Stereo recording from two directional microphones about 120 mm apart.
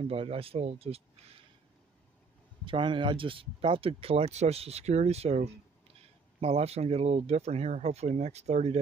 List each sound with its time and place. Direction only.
0.0 s speech: 50° right (ahead or behind)
2.6 s speech: 45° right (ahead or behind); by 8.7 s 70° right (ahead or behind)